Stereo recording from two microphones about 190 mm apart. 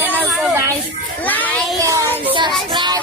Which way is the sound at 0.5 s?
15° right (ahead or behind).